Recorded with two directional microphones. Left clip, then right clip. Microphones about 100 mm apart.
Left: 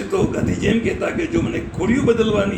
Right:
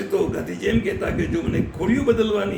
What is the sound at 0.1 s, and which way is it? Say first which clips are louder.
A man's voice: left 3 dB; centre (ahead or behind).